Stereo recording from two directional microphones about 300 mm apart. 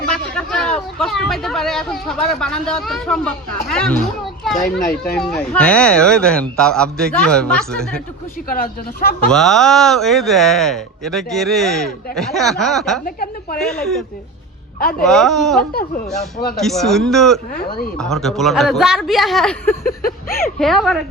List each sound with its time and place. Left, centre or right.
0.1 s speech: centre
4.8 s speech: left
5.1 s speech: centre
8.4 s speech: left
9.3 s speech: centre
13.1 s a woman's voice: left
13.6 s speech: centre
14.8 s speech: left
15.0 s speech: centre
15.7 s speech: left
16.6 s speech: centre
19.8 s speech: left
20.4 s speech: centre